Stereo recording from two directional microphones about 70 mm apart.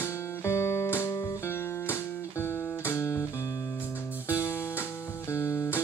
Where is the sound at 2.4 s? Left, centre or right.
Left.